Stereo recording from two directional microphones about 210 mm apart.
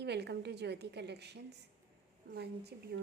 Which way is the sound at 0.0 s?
55° right (ahead or behind).